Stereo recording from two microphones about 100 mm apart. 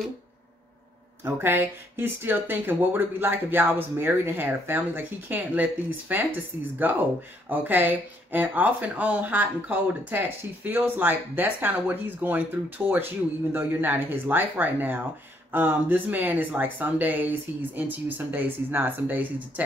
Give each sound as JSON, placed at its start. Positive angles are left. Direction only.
{"t": 1.2, "sound": "speech", "side_deg": -20}